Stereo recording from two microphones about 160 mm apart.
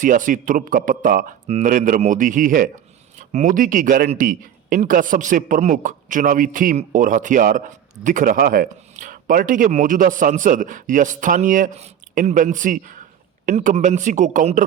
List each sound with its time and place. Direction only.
0.0 s speech: 55° right (ahead or behind)
1.5 s a man's voice: 40° right (ahead or behind)
1.7 s a man's voice: 55° right (ahead or behind)